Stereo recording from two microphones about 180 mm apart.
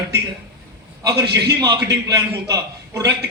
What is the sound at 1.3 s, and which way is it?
Speech, 65° right (ahead or behind).